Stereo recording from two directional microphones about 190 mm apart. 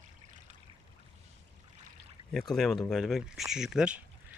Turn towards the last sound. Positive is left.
turn(degrees=-5)  # may be behind; listen again after turning